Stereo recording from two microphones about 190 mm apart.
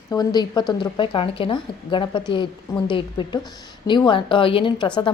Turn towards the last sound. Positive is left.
turn(degrees=25)  # may be behind; listen again after turning